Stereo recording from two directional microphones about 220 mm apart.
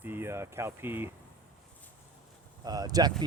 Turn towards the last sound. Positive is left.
turn(degrees=-15)  # may be behind; listen again after turning